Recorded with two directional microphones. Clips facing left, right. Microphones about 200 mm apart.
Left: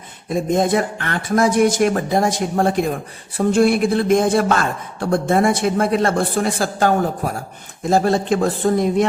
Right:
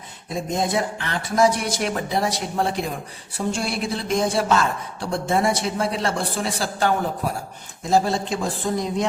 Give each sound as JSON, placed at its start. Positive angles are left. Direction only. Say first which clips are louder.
{"t": 0.3, "sound": "a man's voice", "louder": "left 7 dB", "side_deg": 55}